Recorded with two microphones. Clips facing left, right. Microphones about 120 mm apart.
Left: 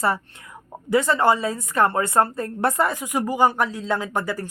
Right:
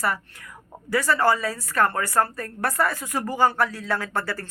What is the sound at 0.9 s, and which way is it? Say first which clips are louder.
A woman's voice: left 3 dB; 20° left (ahead or behind).